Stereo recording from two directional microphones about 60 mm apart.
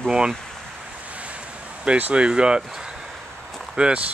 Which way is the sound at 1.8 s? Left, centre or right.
Centre.